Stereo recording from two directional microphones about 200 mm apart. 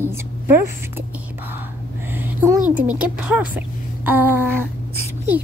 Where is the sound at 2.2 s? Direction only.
10° right (ahead or behind).